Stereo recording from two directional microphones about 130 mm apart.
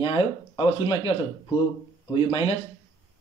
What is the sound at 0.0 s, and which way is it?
Speech, 40° left (ahead or behind).